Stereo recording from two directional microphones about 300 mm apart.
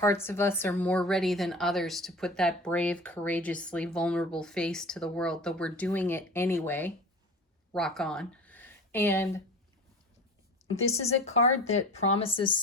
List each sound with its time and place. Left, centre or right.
0.0 s a woman's voice: centre
10.8 s speech: left